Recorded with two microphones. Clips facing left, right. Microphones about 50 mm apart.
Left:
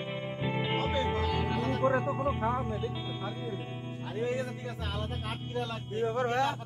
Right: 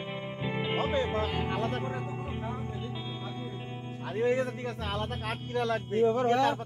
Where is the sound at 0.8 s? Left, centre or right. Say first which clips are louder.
Right 1 dB; right.